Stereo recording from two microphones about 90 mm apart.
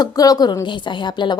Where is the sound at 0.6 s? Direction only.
60° left (ahead or behind).